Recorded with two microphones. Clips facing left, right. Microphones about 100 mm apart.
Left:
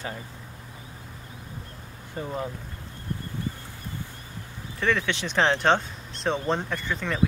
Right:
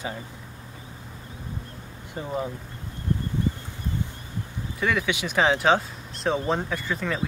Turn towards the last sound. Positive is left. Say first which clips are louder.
# right 1 dB
turn(degrees=-5)  # may be behind; listen again after turning